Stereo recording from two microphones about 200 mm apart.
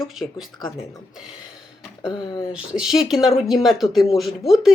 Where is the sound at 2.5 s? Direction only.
5° right (ahead or behind).